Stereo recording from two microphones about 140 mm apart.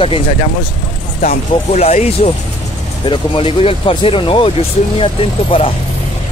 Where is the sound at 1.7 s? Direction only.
50° left (ahead or behind).